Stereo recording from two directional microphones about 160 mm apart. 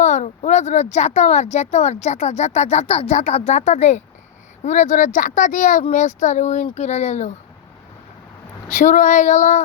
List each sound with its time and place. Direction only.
0.0 s speech: 50° left (ahead or behind)
8.7 s speech: 50° left (ahead or behind)